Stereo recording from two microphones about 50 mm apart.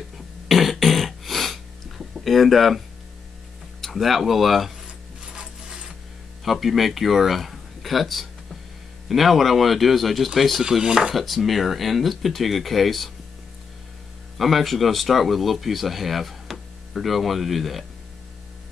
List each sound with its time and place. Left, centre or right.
0.5 s cough: centre
3.8 s speech: centre
5.3 s a sound: centre
6.4 s speech: centre
10.6 s dishes: centre
11.1 s speech: centre
14.4 s speech: centre